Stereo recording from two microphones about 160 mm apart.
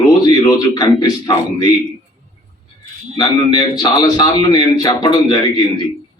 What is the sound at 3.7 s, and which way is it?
A man's voice, 25° left (ahead or behind).